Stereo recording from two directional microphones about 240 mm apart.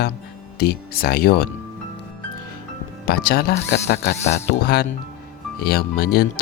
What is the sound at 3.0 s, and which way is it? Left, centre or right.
Speech, left.